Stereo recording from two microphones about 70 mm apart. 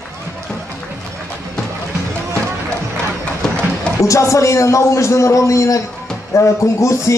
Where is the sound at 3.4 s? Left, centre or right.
Centre.